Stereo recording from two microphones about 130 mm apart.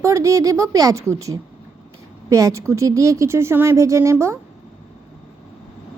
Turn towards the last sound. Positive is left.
turn(degrees=-20)  # may be behind; listen again after turning